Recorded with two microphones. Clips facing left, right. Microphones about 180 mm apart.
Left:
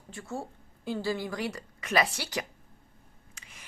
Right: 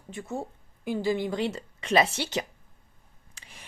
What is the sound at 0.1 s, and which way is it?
A woman's voice, 20° right (ahead or behind).